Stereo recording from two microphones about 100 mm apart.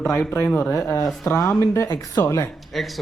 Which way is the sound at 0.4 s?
15° left (ahead or behind).